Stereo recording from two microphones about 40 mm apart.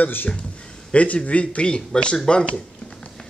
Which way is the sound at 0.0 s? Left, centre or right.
Left.